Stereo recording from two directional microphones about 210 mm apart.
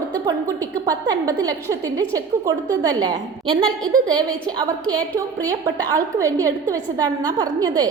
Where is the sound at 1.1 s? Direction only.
15° right (ahead or behind).